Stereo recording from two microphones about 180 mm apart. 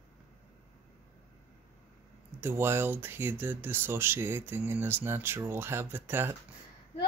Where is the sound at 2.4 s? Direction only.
10° right (ahead or behind).